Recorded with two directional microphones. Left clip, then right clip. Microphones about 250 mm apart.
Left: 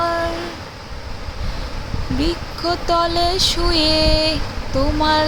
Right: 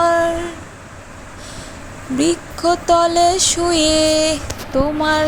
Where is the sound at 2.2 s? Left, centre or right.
Right.